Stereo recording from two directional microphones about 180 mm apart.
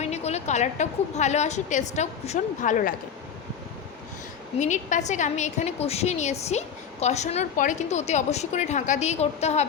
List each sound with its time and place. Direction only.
0.0 s a woman's voice: 35° left (ahead or behind)
4.6 s a woman's voice: 40° left (ahead or behind)